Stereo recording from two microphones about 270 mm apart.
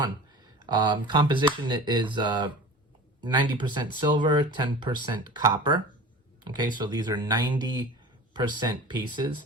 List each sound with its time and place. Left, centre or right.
0.6 s speech: centre